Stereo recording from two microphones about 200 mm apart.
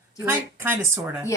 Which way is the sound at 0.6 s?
10° right (ahead or behind).